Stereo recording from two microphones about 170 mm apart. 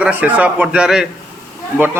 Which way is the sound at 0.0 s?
10° right (ahead or behind).